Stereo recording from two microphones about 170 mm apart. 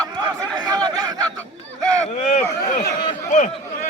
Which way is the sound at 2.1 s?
45° left (ahead or behind).